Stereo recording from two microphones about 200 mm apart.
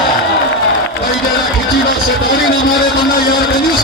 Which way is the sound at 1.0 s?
50° left (ahead or behind).